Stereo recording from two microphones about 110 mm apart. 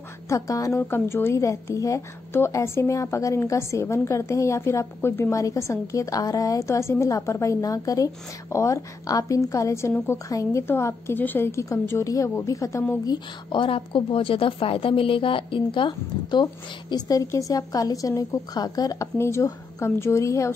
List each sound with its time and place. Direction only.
0.3 s a woman's voice: 30° left (ahead or behind)
13.0 s a woman's voice: 40° left (ahead or behind)
16.9 s a woman's voice: 30° left (ahead or behind)
19.1 s a woman's voice: 25° left (ahead or behind)